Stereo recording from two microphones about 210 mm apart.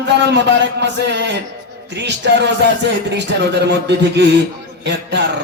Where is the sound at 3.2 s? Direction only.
55° right (ahead or behind).